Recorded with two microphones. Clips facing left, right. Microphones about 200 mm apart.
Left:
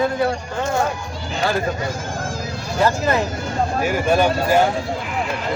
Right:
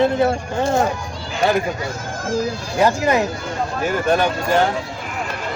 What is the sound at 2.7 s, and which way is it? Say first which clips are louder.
Speech: right 2 dB; 15° right (ahead or behind).